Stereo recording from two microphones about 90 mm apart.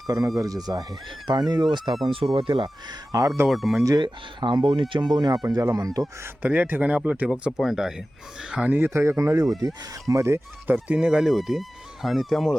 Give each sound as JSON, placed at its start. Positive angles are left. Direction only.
{"t": 0.3, "sound": "speech", "side_deg": -40}
{"t": 2.3, "sound": "speech", "side_deg": -70}
{"t": 3.1, "sound": "speech", "side_deg": -40}
{"t": 3.4, "sound": "speech", "side_deg": 0}
{"t": 4.0, "sound": "speech", "side_deg": -60}
{"t": 5.1, "sound": "speech", "side_deg": -50}
{"t": 6.2, "sound": "speech", "side_deg": -20}
{"t": 8.8, "sound": "speech", "side_deg": -30}
{"t": 10.7, "sound": "speech", "side_deg": -10}